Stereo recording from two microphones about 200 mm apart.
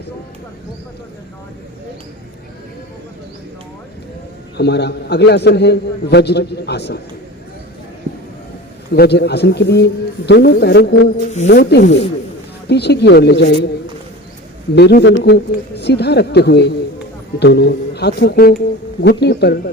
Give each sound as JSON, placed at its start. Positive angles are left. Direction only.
{"t": 4.5, "sound": "a man's voice", "side_deg": 55}
{"t": 8.9, "sound": "a man's voice", "side_deg": 55}
{"t": 14.8, "sound": "a man's voice", "side_deg": 55}